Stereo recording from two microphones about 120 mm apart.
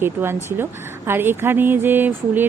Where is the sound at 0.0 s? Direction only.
20° right (ahead or behind).